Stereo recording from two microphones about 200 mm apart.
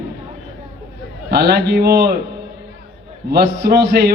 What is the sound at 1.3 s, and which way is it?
Speech, 55° right (ahead or behind).